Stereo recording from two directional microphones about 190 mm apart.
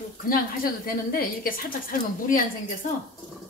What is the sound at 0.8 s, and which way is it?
A woman's voice, 50° left (ahead or behind).